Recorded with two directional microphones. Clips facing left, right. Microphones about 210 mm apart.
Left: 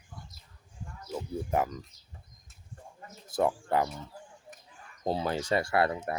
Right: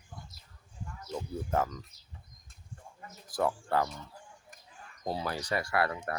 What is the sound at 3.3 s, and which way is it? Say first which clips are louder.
Speech: left 3 dB; 20° left (ahead or behind).